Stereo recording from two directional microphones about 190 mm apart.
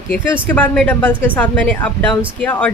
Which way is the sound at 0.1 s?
5° left (ahead or behind).